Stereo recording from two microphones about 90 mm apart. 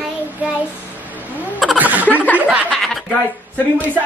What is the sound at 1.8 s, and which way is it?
Snicker, 15° right (ahead or behind).